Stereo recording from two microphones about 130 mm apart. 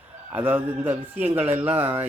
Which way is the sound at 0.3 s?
15° right (ahead or behind).